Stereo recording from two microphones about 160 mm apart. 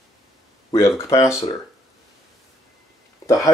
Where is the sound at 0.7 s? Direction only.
15° left (ahead or behind).